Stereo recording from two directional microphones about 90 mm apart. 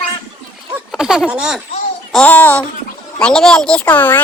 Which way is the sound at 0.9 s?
5° right (ahead or behind).